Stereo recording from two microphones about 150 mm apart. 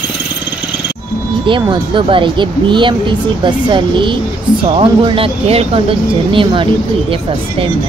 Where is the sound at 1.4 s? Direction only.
35° right (ahead or behind).